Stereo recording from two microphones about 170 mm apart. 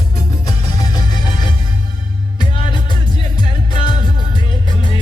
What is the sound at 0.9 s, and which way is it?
Music, 25° left (ahead or behind).